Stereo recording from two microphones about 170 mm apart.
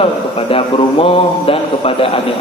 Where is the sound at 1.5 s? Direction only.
35° left (ahead or behind).